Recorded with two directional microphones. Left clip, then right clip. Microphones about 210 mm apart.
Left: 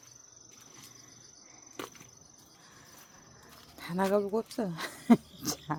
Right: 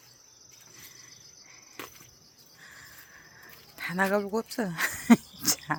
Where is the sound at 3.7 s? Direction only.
5° left (ahead or behind).